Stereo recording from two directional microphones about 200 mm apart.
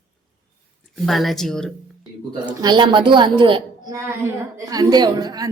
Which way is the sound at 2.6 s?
20° right (ahead or behind).